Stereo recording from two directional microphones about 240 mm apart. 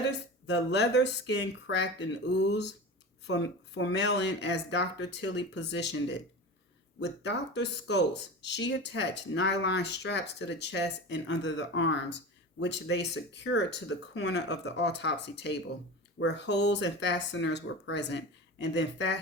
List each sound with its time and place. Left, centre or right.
0.4 s speech: left